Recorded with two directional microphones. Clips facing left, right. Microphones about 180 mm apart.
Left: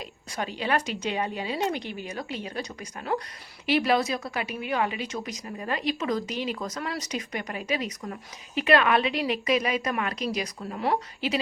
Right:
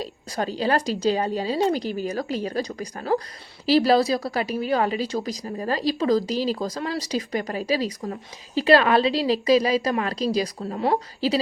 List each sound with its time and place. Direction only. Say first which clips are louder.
0.0 s a woman's voice: right 6 dB; 35° right (ahead or behind)